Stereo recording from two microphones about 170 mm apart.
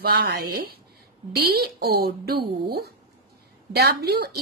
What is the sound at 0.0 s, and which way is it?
A woman's voice, 70° right (ahead or behind).